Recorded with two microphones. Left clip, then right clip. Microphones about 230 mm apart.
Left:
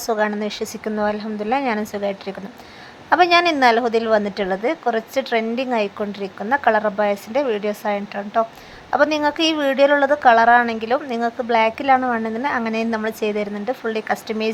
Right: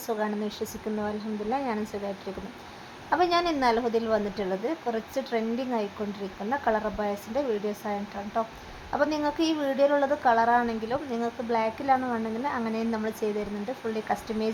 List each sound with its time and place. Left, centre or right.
0.0 s a woman's voice: left
3.1 s a woman's voice: left